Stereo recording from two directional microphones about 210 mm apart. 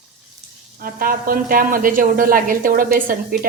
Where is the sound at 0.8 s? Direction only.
45° right (ahead or behind).